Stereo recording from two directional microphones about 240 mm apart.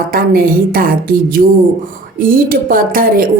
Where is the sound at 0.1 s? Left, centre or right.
Right.